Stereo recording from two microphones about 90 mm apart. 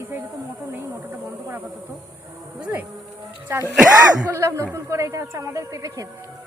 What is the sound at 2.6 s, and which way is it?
Speech, 20° right (ahead or behind).